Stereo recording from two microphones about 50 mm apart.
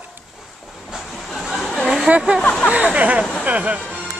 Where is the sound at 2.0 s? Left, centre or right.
Right.